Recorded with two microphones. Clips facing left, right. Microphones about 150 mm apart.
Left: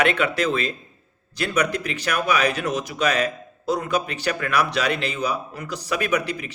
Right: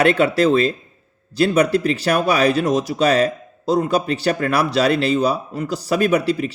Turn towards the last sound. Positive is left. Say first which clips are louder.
# right 7 dB
turn(degrees=-30)  # may be behind; listen again after turning